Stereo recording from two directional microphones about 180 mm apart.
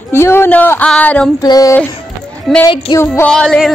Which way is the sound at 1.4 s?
20° left (ahead or behind).